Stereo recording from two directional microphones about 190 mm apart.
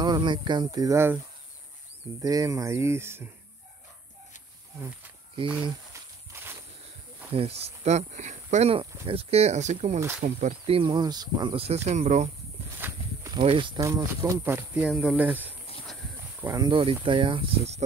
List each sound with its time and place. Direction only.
0.0 s speech: 25° right (ahead or behind)
2.2 s speech: 15° right (ahead or behind)
7.3 s speech: 30° right (ahead or behind)
9.9 s speech: 10° right (ahead or behind)
10.2 s speech: 40° right (ahead or behind)
10.8 s speech: 25° right (ahead or behind)
12.8 s speech: 20° right (ahead or behind)
16.4 s speech: 20° right (ahead or behind)